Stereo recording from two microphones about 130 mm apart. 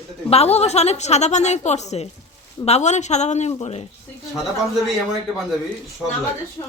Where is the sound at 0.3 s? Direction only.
55° left (ahead or behind).